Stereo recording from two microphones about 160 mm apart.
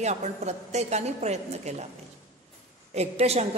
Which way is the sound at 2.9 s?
40° right (ahead or behind).